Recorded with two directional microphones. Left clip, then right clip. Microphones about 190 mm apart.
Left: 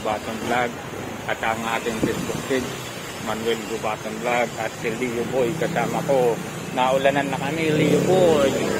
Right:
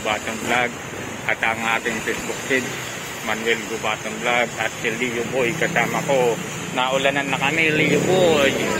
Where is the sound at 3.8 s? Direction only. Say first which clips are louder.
Right 3 dB; centre (ahead or behind).